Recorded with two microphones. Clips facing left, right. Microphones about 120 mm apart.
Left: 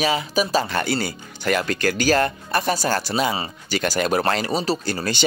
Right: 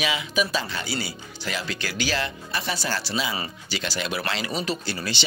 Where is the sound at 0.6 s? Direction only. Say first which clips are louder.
Left 7 dB; 55° left (ahead or behind).